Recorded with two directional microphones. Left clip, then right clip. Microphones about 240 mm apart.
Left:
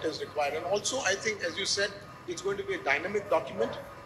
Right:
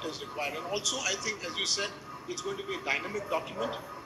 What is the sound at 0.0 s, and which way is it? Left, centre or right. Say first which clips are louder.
A man's voice: left 4 dB; left.